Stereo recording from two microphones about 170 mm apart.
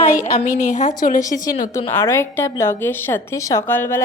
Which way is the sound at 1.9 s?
15° left (ahead or behind).